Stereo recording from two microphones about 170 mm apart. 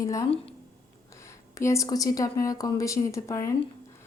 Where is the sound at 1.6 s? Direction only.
20° left (ahead or behind).